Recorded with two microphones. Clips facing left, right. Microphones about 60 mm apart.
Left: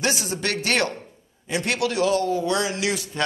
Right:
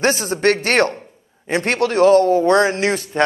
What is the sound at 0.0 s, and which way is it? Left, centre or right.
A man's voice, right.